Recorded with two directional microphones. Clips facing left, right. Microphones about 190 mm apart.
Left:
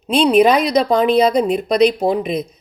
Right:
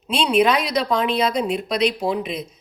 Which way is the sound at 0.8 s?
40° left (ahead or behind).